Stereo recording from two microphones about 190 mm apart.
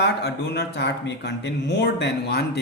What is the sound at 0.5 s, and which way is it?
A man's voice, 60° left (ahead or behind).